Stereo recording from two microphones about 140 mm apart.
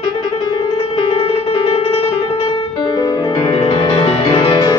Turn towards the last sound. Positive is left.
turn(degrees=35)  # may be behind; listen again after turning